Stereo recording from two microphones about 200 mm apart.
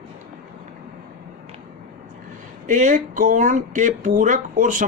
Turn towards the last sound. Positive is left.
turn(degrees=-40)  # may be behind; listen again after turning